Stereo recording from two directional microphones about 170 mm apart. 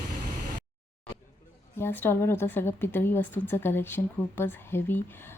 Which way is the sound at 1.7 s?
15° left (ahead or behind).